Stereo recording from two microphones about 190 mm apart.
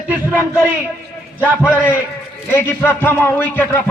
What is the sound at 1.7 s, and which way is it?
A man's voice, 10° left (ahead or behind).